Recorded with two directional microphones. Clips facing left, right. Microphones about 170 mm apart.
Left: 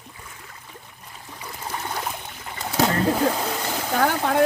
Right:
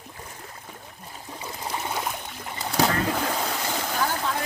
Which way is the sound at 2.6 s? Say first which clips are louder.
Left 2 dB; centre (ahead or behind).